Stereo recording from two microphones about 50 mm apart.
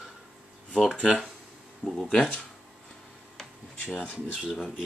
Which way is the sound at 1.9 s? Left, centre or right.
Centre.